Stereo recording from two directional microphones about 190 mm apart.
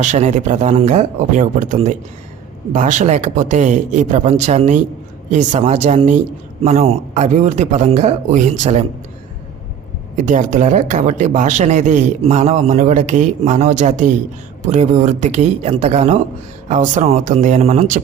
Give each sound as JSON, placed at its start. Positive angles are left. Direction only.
{"t": 0.0, "sound": "speech", "side_deg": -40}
{"t": 10.2, "sound": "speech", "side_deg": -40}